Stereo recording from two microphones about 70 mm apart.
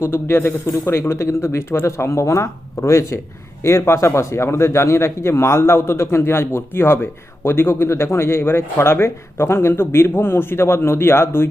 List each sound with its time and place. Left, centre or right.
0.0 s a man's voice: left